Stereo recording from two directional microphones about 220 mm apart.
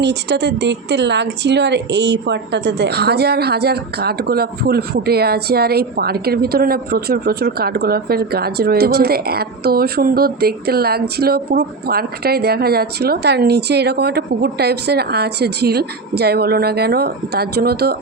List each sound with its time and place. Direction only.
0.0 s a woman's voice: 50° right (ahead or behind)